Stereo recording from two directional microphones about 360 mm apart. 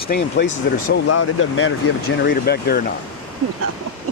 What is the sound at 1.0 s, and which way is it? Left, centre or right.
Speech, left.